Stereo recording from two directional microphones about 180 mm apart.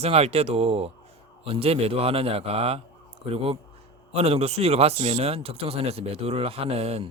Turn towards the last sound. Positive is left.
turn(degrees=-35)  # may be behind; listen again after turning